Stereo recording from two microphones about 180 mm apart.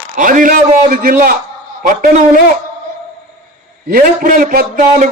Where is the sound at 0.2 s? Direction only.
50° right (ahead or behind).